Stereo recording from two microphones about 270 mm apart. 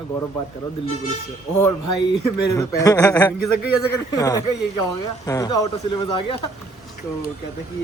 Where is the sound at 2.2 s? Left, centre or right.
Centre.